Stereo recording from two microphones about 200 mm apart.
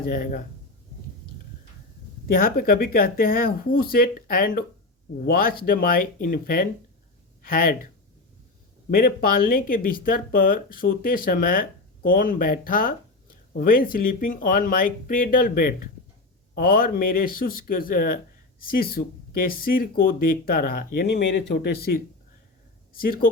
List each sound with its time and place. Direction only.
0.1 s speech: 40° left (ahead or behind)
2.2 s speech: 45° left (ahead or behind)
8.9 s speech: 45° left (ahead or behind)